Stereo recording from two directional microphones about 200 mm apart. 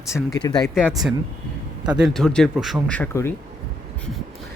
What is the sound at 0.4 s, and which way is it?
Speech, 20° left (ahead or behind).